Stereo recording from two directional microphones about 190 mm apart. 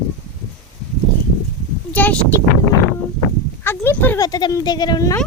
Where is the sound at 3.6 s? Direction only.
10° left (ahead or behind).